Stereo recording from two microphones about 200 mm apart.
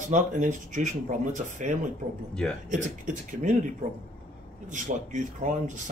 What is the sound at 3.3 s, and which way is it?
A man's voice, 40° right (ahead or behind).